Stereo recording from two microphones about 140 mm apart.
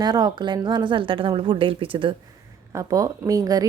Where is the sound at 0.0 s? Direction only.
30° right (ahead or behind).